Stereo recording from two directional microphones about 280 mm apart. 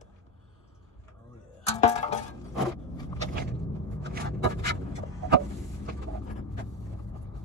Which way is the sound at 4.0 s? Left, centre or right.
Right.